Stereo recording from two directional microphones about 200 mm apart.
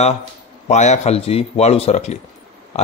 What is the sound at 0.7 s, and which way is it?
A man's voice, 35° left (ahead or behind).